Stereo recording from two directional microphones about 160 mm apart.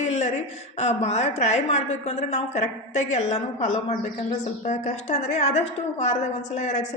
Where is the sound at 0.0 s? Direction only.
45° left (ahead or behind).